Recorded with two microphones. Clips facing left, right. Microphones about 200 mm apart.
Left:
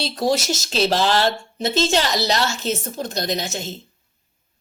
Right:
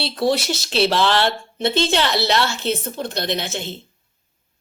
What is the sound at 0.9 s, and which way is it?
A woman's voice, 40° left (ahead or behind).